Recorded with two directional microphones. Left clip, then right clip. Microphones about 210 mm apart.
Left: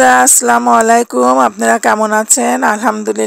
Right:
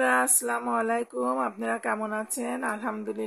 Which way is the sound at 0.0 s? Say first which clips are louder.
Left 16 dB; 45° left (ahead or behind).